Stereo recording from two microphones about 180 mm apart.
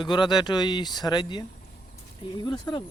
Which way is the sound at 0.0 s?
25° left (ahead or behind).